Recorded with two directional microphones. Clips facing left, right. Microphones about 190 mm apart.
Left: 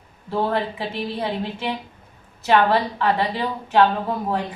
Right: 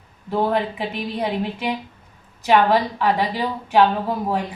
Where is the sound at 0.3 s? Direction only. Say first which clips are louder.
Right 2 dB; 15° right (ahead or behind).